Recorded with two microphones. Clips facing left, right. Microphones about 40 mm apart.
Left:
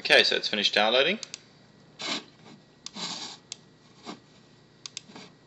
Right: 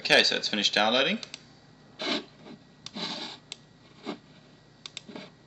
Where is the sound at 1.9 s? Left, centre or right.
Centre.